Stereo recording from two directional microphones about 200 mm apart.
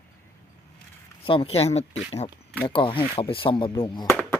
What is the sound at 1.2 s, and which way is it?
Speech, 25° left (ahead or behind).